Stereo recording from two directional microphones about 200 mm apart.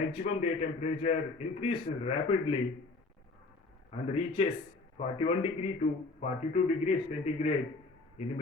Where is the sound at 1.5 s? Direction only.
30° left (ahead or behind).